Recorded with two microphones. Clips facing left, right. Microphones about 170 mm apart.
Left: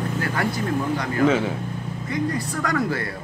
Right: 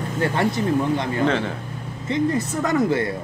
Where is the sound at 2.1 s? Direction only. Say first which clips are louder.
Right 4 dB; 25° right (ahead or behind).